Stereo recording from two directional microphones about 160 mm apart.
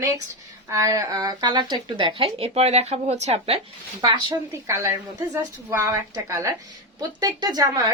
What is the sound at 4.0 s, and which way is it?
A woman's voice, 30° right (ahead or behind).